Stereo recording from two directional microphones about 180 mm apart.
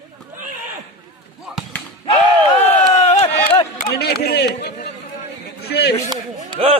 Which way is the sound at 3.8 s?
65° left (ahead or behind).